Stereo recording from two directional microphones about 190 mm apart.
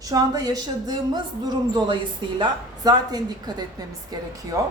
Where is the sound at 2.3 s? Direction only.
20° right (ahead or behind).